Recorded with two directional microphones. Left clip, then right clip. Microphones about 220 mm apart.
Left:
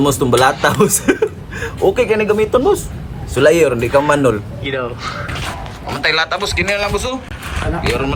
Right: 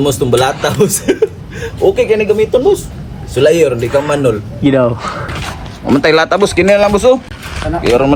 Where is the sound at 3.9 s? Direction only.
50° left (ahead or behind).